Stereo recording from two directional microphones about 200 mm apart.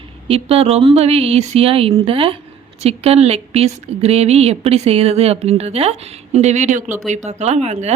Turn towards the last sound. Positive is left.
turn(degrees=-35)  # may be behind; listen again after turning